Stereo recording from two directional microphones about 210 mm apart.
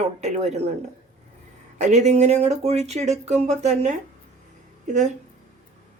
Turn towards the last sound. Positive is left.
turn(degrees=-35)  # may be behind; listen again after turning